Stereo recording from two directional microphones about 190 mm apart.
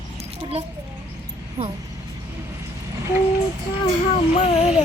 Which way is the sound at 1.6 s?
35° right (ahead or behind).